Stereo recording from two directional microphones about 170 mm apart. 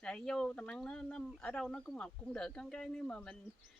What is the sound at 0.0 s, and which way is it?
Speech, 5° left (ahead or behind).